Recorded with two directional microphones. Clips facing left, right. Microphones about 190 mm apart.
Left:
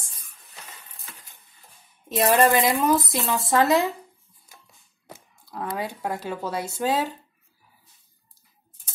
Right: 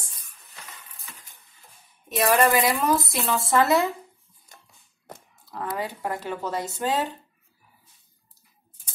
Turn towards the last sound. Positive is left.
turn(degrees=10)  # may be behind; listen again after turning